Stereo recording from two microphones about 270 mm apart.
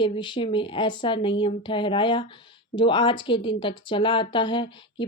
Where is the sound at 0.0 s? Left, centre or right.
Centre.